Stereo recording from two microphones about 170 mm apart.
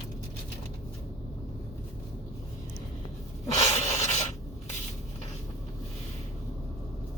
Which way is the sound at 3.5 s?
40° left (ahead or behind).